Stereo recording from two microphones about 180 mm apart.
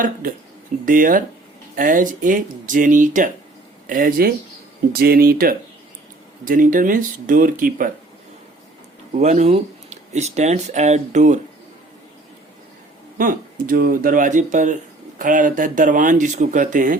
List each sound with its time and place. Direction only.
0.0 s speech: 50° right (ahead or behind)
9.1 s speech: 40° right (ahead or behind)
13.1 s speech: 50° right (ahead or behind)